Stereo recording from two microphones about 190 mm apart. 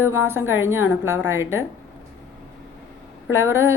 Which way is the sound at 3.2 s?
10° right (ahead or behind).